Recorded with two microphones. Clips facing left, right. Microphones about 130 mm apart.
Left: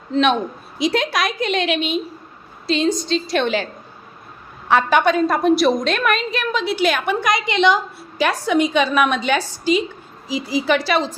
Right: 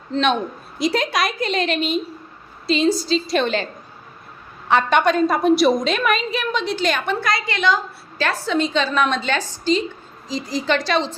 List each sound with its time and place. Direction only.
0.1 s a woman's voice: centre (ahead or behind)
4.7 s a woman's voice: 5° left (ahead or behind)